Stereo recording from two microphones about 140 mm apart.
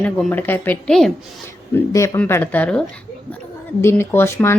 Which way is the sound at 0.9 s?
5° left (ahead or behind).